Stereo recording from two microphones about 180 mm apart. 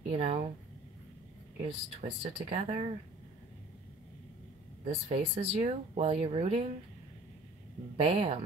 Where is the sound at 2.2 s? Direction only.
35° right (ahead or behind).